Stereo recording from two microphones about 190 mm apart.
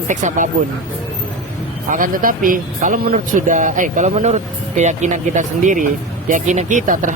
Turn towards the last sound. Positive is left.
turn(degrees=-45)  # may be behind; listen again after turning